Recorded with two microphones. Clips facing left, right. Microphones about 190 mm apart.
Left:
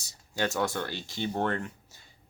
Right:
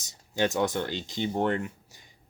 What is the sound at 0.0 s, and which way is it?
Speech, 20° right (ahead or behind).